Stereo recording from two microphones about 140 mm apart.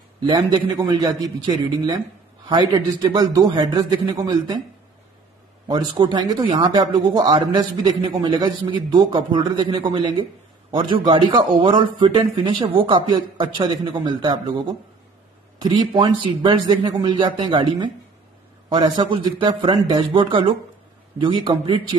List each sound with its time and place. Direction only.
0.3 s a man's voice: 30° right (ahead or behind)
5.7 s speech: 30° right (ahead or behind)